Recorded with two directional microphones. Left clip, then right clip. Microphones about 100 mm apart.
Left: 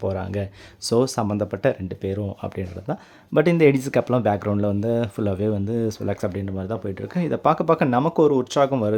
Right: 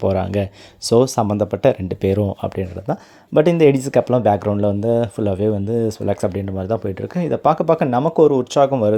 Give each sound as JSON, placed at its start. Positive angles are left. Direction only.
{"t": 0.0, "sound": "speech", "side_deg": -55}
{"t": 0.9, "sound": "speech", "side_deg": -25}
{"t": 1.3, "sound": "speech", "side_deg": -35}
{"t": 1.9, "sound": "speech", "side_deg": -65}
{"t": 2.4, "sound": "speech", "side_deg": -35}
{"t": 3.3, "sound": "speech", "side_deg": -20}
{"t": 7.1, "sound": "speech", "side_deg": -15}